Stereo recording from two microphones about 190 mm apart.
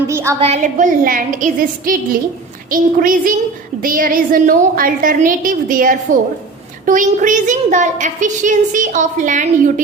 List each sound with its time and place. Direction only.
0.1 s speech: 15° right (ahead or behind)
0.3 s a woman's voice: 35° right (ahead or behind)